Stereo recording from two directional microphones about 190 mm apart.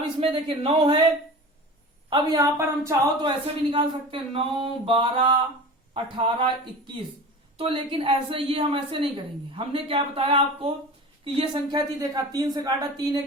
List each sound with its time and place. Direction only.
0.2 s a woman's voice: 30° right (ahead or behind)
2.0 s a woman's voice: 25° right (ahead or behind)
7.6 s a woman's voice: 25° right (ahead or behind)